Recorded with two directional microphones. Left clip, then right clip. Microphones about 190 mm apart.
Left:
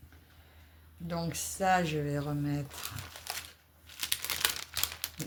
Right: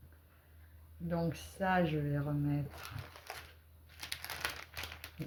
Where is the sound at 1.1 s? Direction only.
45° left (ahead or behind).